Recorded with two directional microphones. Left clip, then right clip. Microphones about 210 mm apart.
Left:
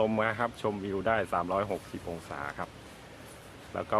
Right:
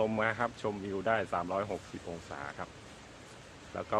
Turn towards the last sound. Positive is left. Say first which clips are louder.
# left 4 dB
turn(degrees=25)  # may be behind; listen again after turning